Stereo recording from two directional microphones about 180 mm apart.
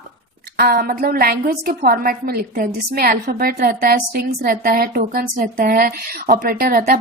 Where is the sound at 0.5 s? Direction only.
55° right (ahead or behind).